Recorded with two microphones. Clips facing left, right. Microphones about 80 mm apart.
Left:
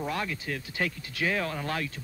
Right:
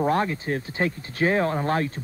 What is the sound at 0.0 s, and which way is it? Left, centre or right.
Speech, right.